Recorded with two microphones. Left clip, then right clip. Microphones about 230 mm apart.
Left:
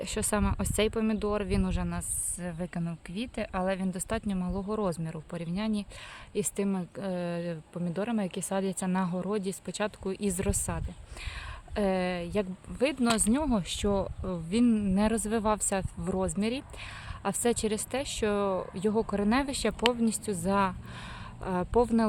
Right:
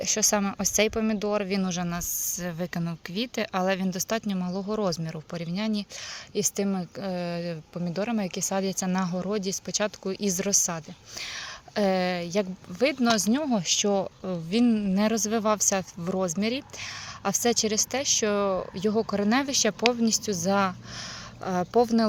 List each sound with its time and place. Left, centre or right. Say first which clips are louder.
0.0 s a woman's voice: right 6 dB; centre